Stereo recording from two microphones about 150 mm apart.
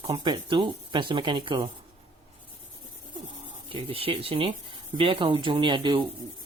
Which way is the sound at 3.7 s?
40° right (ahead or behind).